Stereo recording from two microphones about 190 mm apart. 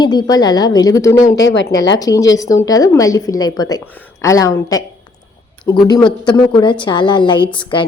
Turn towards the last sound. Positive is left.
turn(degrees=25)  # may be behind; listen again after turning